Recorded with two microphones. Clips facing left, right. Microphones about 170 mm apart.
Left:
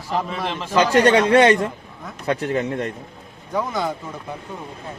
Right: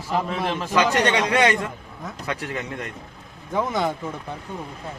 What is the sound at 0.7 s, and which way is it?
Speech, 35° left (ahead or behind).